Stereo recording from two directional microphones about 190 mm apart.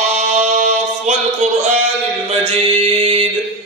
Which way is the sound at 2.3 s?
35° right (ahead or behind).